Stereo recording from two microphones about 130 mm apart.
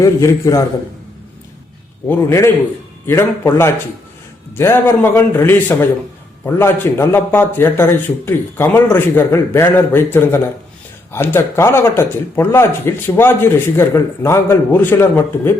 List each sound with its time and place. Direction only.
0.0 s speech: 25° left (ahead or behind)
2.0 s a man's voice: 20° left (ahead or behind)